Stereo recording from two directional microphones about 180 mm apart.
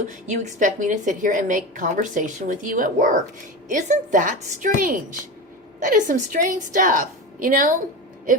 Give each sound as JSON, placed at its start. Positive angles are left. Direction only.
{"t": 0.1, "sound": "a woman's voice", "side_deg": -45}